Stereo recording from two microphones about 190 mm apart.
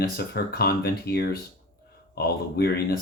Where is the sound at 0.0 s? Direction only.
55° left (ahead or behind).